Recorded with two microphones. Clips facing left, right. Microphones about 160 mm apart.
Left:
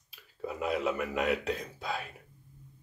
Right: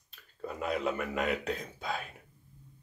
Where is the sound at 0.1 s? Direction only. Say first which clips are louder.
Left 2 dB; 5° left (ahead or behind).